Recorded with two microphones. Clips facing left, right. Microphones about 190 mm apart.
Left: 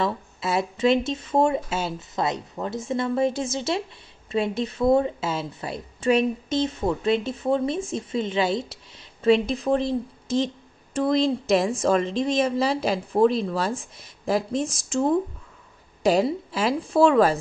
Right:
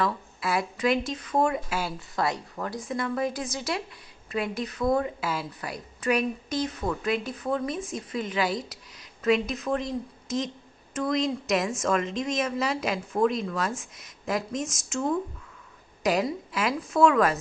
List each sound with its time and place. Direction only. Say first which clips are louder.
0.0 s a woman's voice: left 2 dB; 25° left (ahead or behind)